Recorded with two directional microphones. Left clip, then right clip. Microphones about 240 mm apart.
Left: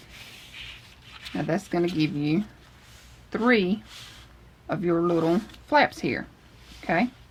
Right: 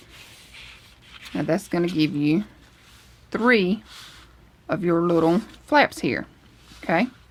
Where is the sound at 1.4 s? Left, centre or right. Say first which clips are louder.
Right 3 dB; right.